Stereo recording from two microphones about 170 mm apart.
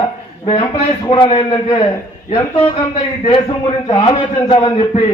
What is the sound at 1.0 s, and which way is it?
Speech, 30° left (ahead or behind).